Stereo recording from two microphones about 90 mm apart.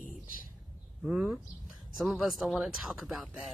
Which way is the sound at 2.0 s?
Centre (ahead or behind).